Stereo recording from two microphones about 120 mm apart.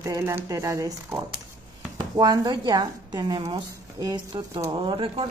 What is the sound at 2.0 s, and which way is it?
Speech, 35° right (ahead or behind).